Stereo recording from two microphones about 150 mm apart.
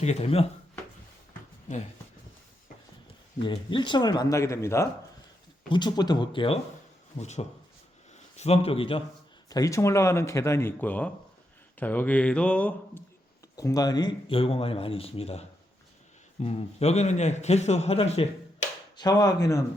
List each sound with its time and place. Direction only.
0.0 s a man's voice: 45° left (ahead or behind)
3.4 s speech: 35° left (ahead or behind)
5.6 s speech: 30° left (ahead or behind)
7.2 s a man's voice: 50° left (ahead or behind)
9.5 s speech: 20° left (ahead or behind)
13.6 s a man's voice: 25° left (ahead or behind); by 18.3 s 40° left (ahead or behind)
18.9 s speech: 25° left (ahead or behind)